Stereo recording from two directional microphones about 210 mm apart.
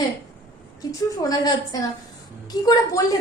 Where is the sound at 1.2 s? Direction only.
15° left (ahead or behind).